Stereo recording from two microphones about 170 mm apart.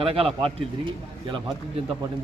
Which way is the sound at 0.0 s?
35° right (ahead or behind).